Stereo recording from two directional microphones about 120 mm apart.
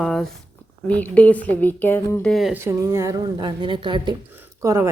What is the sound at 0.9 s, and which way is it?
Speech, 15° left (ahead or behind).